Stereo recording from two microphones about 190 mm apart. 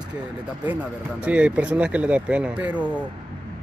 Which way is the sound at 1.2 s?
5° right (ahead or behind).